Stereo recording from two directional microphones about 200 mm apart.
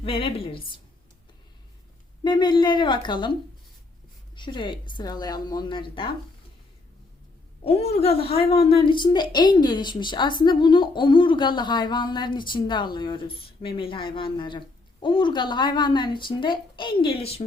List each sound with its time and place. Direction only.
0.0 s a woman's voice: 25° left (ahead or behind)
2.2 s a woman's voice: 20° left (ahead or behind)
4.4 s a woman's voice: 25° left (ahead or behind)
7.6 s a woman's voice: 30° left (ahead or behind)